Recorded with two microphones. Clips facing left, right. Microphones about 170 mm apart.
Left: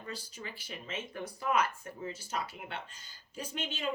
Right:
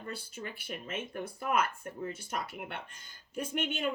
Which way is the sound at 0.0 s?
55° right (ahead or behind).